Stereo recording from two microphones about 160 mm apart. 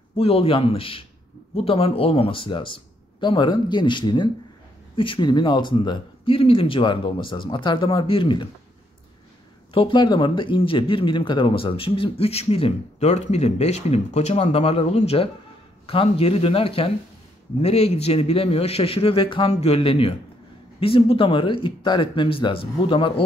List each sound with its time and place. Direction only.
0.1 s speech: 35° left (ahead or behind)
9.8 s speech: 30° left (ahead or behind)